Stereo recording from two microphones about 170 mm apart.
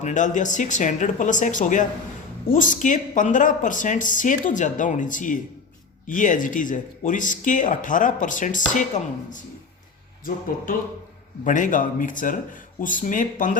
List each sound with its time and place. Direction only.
0.0 s speech: 50° left (ahead or behind)
11.4 s speech: 50° left (ahead or behind)